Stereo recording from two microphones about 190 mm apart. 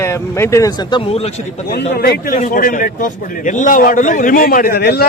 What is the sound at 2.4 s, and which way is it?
A man's voice, 45° left (ahead or behind).